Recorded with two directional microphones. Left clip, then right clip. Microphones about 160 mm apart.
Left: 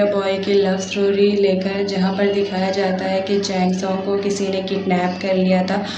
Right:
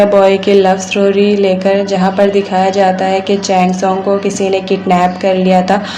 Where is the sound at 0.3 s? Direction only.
40° right (ahead or behind).